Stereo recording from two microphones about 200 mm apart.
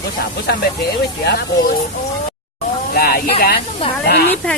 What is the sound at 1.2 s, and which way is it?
Speech, 55° left (ahead or behind).